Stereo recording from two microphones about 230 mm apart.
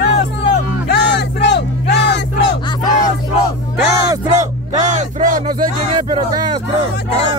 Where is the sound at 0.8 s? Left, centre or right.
Left.